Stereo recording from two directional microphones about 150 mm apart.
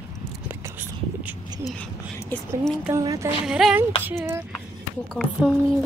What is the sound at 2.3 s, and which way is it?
Speech, 5° left (ahead or behind).